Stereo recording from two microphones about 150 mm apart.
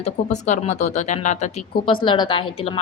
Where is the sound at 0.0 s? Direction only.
50° left (ahead or behind).